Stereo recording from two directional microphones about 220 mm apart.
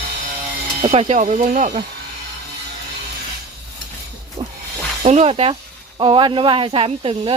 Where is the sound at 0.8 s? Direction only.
30° right (ahead or behind).